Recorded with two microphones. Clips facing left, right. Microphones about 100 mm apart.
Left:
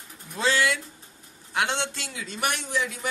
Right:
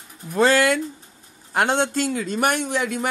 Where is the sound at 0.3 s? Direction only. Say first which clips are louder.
Right 7 dB; 50° right (ahead or behind).